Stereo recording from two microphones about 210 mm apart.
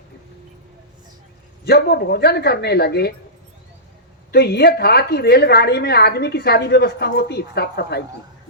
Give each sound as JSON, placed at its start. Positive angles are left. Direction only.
{"t": 1.6, "sound": "a woman's voice", "side_deg": 50}
{"t": 4.3, "sound": "a woman's voice", "side_deg": 50}